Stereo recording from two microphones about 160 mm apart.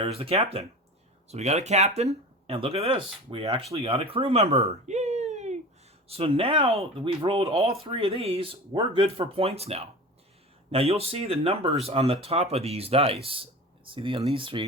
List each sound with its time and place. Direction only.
0.0 s speech: 35° right (ahead or behind)